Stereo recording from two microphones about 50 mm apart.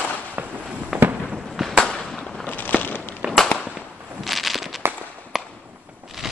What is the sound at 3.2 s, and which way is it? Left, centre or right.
Firecracker, right.